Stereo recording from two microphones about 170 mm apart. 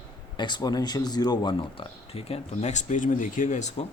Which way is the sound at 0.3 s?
25° left (ahead or behind).